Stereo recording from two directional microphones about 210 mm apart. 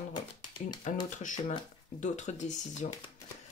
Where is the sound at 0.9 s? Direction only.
35° left (ahead or behind).